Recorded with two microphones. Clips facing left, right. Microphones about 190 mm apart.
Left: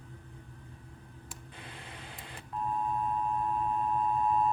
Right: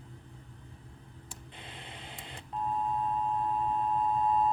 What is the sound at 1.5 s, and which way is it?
Printer, 25° right (ahead or behind).